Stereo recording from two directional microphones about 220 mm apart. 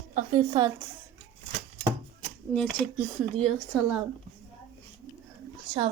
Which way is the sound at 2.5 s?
10° left (ahead or behind).